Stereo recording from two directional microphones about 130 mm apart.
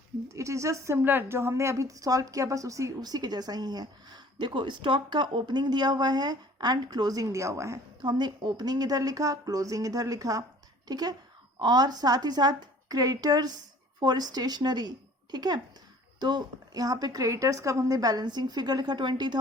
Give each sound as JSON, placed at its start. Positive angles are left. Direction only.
{"t": 0.3, "sound": "a woman's voice", "side_deg": -25}
{"t": 8.0, "sound": "a woman's voice", "side_deg": -35}